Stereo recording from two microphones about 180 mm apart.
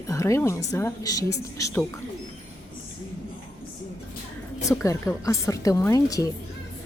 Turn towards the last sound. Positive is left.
turn(degrees=20)  # may be behind; listen again after turning